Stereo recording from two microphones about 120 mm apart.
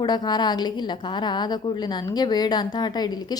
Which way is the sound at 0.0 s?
35° left (ahead or behind).